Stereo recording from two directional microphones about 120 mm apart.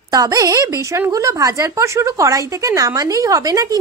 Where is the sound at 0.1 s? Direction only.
30° right (ahead or behind).